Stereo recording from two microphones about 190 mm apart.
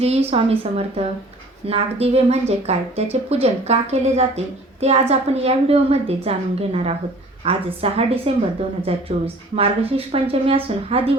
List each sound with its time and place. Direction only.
0.0 s a woman's voice: 35° right (ahead or behind)